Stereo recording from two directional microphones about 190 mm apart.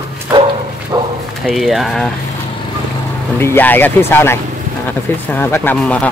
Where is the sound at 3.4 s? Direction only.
10° left (ahead or behind).